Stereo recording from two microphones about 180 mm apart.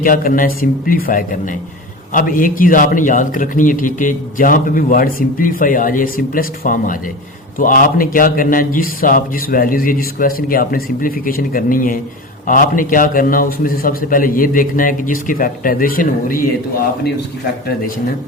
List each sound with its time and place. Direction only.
0.0 s a man's voice: 50° left (ahead or behind)